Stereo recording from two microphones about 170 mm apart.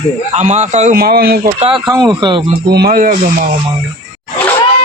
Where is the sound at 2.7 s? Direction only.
65° right (ahead or behind).